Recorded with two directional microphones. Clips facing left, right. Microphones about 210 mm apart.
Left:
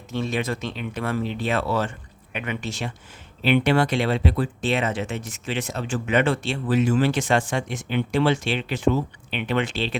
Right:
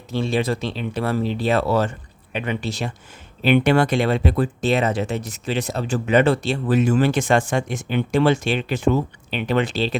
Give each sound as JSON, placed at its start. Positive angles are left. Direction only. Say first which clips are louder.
{"t": 0.1, "sound": "speech", "louder": "right 4 dB", "side_deg": -35}
{"t": 3.4, "sound": "speech", "louder": "right 3 dB", "side_deg": -50}